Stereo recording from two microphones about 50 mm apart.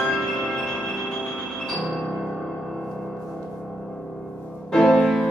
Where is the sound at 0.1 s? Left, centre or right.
Centre.